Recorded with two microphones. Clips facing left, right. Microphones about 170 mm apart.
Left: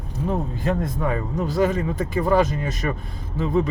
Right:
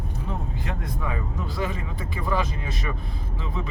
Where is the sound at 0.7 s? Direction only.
45° left (ahead or behind).